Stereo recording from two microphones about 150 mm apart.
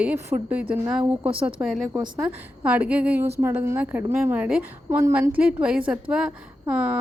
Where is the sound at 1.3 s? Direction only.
40° right (ahead or behind).